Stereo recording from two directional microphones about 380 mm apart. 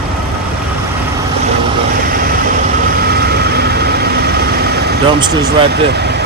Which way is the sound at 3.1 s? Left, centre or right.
Right.